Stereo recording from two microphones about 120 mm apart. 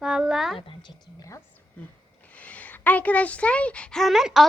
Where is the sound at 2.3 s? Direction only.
10° left (ahead or behind).